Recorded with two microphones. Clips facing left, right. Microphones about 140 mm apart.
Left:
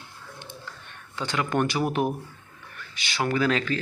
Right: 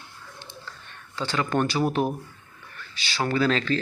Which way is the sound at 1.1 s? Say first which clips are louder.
Right 1 dB; 15° left (ahead or behind).